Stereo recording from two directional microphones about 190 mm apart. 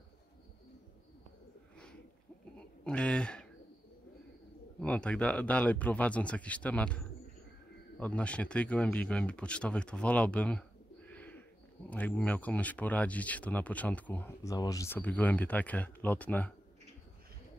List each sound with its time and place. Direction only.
2.8 s a sound: 5° left (ahead or behind)
4.7 s speech: 5° left (ahead or behind)
8.0 s speech: 5° left (ahead or behind)